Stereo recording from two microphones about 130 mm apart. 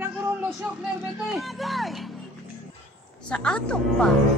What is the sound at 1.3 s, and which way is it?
Speech, centre (ahead or behind).